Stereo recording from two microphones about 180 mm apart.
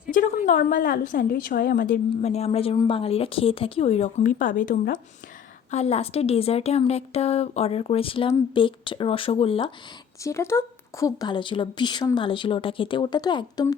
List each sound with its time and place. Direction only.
0.1 s a woman's voice: 45° left (ahead or behind)
2.2 s speech: 35° left (ahead or behind)
5.7 s speech: 35° left (ahead or behind)
10.2 s speech: 15° left (ahead or behind)